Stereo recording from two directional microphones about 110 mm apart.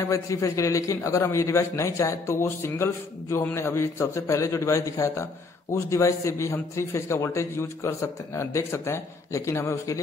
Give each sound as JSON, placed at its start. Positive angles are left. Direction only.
{"t": 0.0, "sound": "a man's voice", "side_deg": 30}